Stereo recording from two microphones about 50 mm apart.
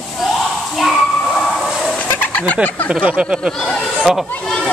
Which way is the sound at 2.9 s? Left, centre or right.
Centre.